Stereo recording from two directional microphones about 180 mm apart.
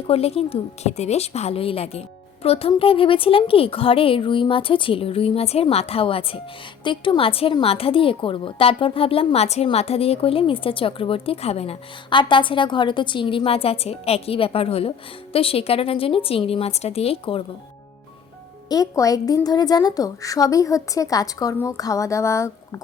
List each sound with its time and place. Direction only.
0.1 s a woman's voice: 35° left (ahead or behind)
18.7 s a woman's voice: 20° left (ahead or behind)